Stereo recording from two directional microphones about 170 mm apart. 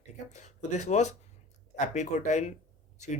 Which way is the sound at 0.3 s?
45° left (ahead or behind).